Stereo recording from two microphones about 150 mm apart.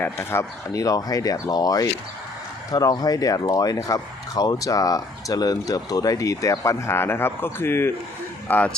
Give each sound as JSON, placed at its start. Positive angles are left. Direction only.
{"t": 0.0, "sound": "speech", "side_deg": 15}